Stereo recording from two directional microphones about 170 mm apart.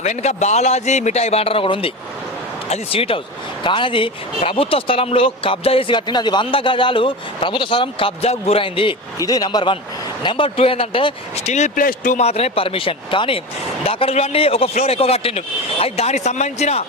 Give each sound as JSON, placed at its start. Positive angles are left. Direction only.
{"t": 0.0, "sound": "speech", "side_deg": 40}